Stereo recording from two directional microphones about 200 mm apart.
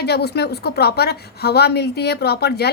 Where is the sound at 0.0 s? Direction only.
55° left (ahead or behind).